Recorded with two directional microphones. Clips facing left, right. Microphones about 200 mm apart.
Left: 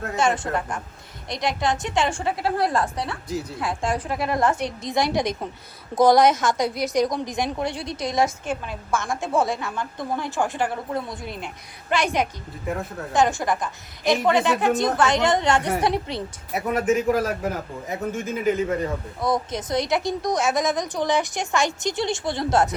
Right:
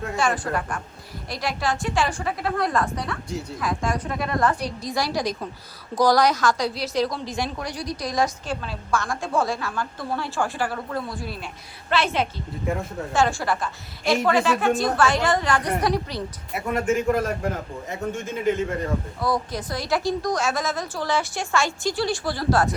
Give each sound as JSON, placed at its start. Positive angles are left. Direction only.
{"t": 0.2, "sound": "a woman's voice", "side_deg": 20}
{"t": 12.6, "sound": "a man's voice", "side_deg": 0}
{"t": 13.1, "sound": "a woman's voice", "side_deg": 15}
{"t": 16.5, "sound": "a man's voice", "side_deg": 0}
{"t": 19.2, "sound": "a woman's voice", "side_deg": 20}